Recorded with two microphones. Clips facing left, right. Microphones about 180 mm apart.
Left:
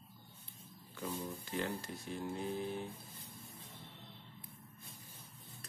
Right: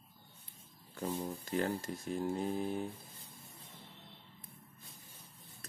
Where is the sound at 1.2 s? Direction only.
45° right (ahead or behind).